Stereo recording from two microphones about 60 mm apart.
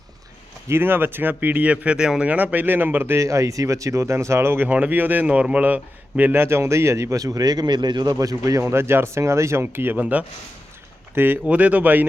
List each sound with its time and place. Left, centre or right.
0.7 s speech: right; by 2.3 s centre
2.3 s speech: right
3.2 s speech: right
4.7 s speech: right
5.2 s a man's voice: centre
6.3 s speech: right
8.6 s speech: right
10.0 s a man's voice: right
11.1 s speech: right
11.4 s a man's voice: right